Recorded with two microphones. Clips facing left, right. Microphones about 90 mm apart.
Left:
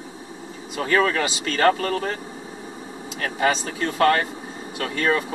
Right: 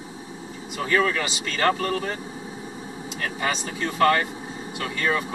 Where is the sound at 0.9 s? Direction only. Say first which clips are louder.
Left 2 dB; 45° left (ahead or behind).